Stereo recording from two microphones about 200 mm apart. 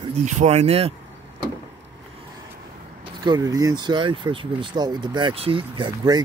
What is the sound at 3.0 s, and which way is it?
Speech, 20° right (ahead or behind).